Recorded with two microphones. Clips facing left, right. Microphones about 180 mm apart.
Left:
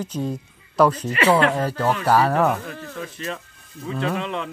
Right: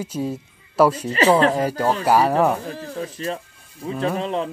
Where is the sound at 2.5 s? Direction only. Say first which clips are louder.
Right 2 dB; 35° right (ahead or behind).